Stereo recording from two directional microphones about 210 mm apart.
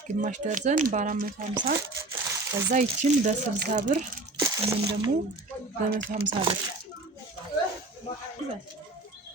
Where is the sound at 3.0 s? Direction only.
30° right (ahead or behind).